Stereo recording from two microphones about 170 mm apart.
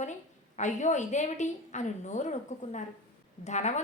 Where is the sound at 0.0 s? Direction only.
45° left (ahead or behind).